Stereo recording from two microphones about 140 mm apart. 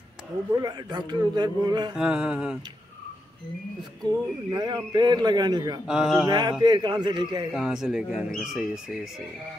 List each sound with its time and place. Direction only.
0.5 s a man's voice: 30° right (ahead or behind)
2.0 s speech: 5° right (ahead or behind)
4.0 s a man's voice: 30° right (ahead or behind)
5.9 s speech: 5° right (ahead or behind)
6.2 s a man's voice: 30° right (ahead or behind)
7.5 s speech: 5° right (ahead or behind)